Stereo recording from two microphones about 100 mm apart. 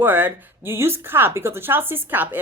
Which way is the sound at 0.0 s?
20° right (ahead or behind).